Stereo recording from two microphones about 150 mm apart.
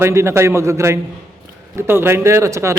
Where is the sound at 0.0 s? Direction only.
20° right (ahead or behind).